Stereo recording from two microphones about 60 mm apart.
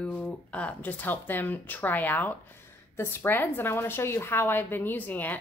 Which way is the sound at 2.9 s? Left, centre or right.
Left.